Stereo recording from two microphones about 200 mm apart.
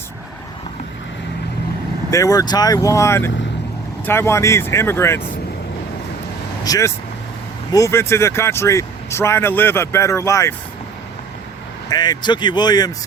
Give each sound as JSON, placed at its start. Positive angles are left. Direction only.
{"t": 2.0, "sound": "speech", "side_deg": 15}
{"t": 6.7, "sound": "speech", "side_deg": 15}
{"t": 11.9, "sound": "speech", "side_deg": 20}